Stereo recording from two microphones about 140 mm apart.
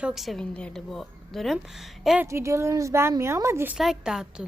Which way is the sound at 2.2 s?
20° right (ahead or behind).